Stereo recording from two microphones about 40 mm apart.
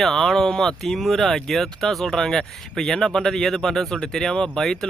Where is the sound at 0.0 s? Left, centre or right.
Centre.